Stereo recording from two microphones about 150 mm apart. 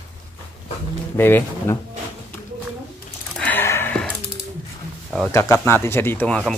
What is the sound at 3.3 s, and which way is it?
Gasp, 10° left (ahead or behind).